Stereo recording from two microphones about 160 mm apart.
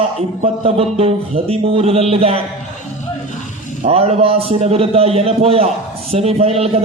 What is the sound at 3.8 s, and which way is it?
A man's voice, 40° right (ahead or behind).